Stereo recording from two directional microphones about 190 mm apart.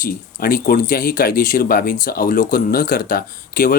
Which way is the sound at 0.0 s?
50° left (ahead or behind).